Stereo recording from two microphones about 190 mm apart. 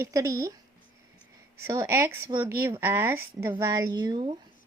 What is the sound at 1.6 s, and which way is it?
A woman's voice, 15° right (ahead or behind).